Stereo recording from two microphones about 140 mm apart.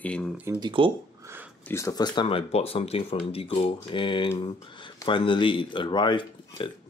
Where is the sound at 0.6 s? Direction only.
35° right (ahead or behind).